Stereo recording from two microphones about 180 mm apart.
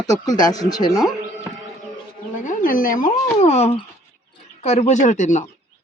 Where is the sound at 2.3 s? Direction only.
45° left (ahead or behind).